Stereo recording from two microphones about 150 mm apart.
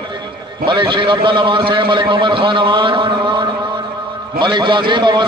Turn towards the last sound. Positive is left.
turn(degrees=-30)  # may be behind; listen again after turning